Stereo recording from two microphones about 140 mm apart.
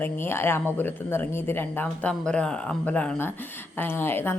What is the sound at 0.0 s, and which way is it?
Speech, 15° left (ahead or behind).